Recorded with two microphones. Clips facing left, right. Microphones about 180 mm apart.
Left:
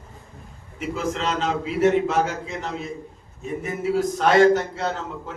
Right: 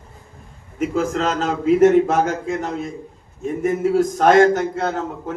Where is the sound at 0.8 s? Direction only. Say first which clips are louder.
Right 6 dB; 45° right (ahead or behind).